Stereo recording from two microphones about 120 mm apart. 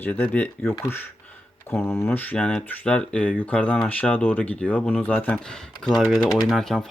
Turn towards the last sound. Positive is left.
turn(degrees=0)  # may be behind; listen again after turning